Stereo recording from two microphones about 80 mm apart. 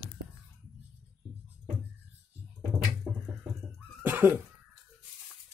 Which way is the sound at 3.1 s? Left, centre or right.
Right.